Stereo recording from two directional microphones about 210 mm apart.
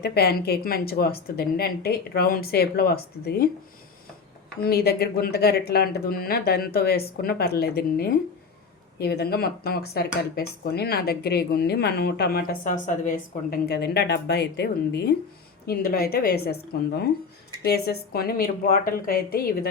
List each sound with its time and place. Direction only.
0.0 s speech: 50° left (ahead or behind)
4.6 s speech: 50° left (ahead or behind)